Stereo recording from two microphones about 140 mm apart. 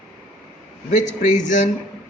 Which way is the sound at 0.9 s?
60° left (ahead or behind).